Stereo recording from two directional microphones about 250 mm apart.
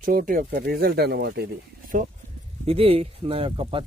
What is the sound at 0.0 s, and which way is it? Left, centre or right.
Speech, right.